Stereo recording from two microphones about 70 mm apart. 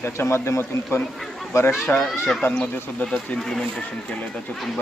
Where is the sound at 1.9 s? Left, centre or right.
Left.